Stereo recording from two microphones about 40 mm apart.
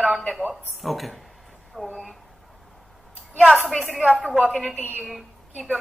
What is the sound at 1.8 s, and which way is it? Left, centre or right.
Speech, centre.